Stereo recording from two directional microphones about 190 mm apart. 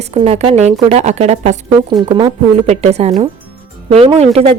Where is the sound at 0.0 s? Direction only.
35° right (ahead or behind).